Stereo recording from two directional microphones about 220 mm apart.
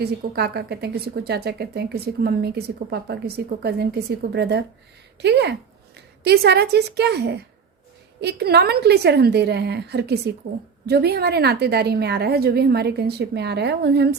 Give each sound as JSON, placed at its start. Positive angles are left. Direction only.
{"t": 0.0, "sound": "speech", "side_deg": -45}